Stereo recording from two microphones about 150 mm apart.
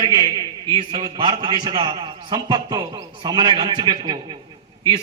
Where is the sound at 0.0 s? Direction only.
30° right (ahead or behind).